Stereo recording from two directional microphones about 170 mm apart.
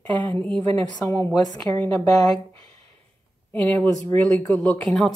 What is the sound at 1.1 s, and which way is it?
Speech, 20° left (ahead or behind).